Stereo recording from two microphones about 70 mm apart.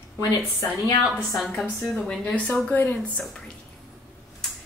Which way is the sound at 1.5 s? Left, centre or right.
Left.